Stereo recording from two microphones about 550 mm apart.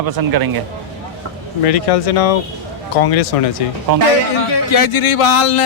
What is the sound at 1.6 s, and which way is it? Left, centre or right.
Speech, left.